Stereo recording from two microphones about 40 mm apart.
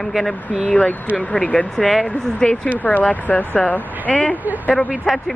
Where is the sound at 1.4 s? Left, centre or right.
Left.